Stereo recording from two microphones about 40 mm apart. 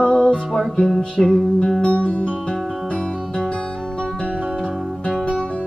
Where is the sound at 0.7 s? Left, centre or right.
Centre.